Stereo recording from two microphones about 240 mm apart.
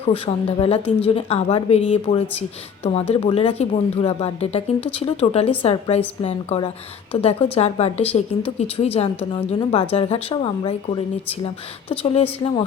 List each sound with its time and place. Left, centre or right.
0.0 s a woman's voice: left